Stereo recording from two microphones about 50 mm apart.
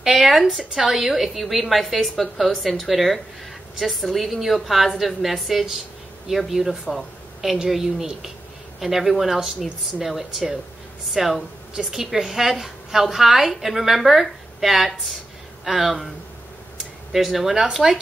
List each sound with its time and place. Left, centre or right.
0.0 s a woman's voice: centre
6.9 s a sound: centre
7.7 s a woman's voice: centre
17.1 s a woman's voice: centre